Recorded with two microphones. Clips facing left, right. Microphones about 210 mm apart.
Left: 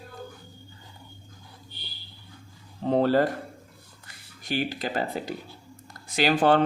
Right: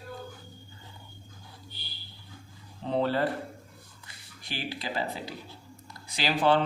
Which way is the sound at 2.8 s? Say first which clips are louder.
Left 5 dB; 45° left (ahead or behind).